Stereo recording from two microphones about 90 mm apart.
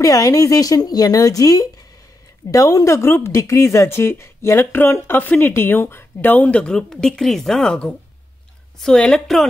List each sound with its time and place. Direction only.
0.0 s a woman's voice: 40° left (ahead or behind); by 9.5 s 5° left (ahead or behind)